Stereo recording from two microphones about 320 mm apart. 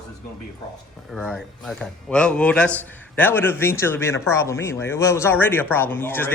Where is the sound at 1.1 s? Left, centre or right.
Centre.